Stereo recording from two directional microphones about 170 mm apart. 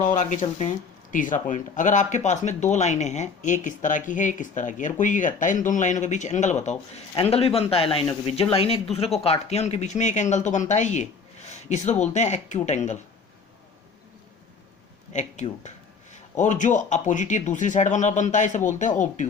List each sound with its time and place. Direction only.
0.0 s speech: 50° left (ahead or behind)
15.1 s speech: 45° left (ahead or behind)